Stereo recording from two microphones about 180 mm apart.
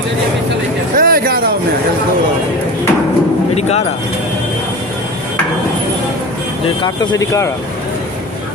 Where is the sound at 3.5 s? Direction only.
35° left (ahead or behind).